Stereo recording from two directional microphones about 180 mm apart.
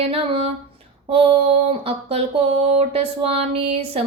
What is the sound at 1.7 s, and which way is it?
Speech, 30° right (ahead or behind).